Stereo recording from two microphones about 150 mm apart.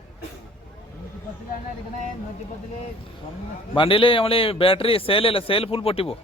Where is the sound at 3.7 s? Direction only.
35° left (ahead or behind).